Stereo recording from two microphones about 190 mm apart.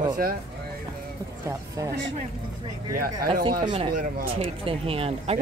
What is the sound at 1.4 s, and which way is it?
Speech, 15° right (ahead or behind).